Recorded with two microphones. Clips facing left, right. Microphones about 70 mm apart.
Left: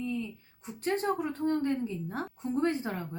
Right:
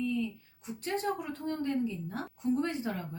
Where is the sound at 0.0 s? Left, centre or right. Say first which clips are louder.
Right 2 dB; left.